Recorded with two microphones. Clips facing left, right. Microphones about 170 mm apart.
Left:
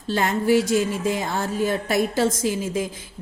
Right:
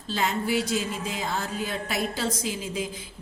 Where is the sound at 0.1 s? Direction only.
50° left (ahead or behind).